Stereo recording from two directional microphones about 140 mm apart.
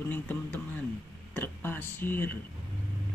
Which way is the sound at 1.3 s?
15° left (ahead or behind).